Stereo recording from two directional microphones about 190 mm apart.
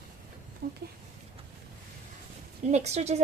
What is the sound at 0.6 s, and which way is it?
Speech, 55° right (ahead or behind).